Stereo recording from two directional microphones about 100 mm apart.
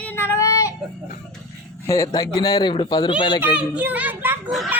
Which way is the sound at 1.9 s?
35° left (ahead or behind).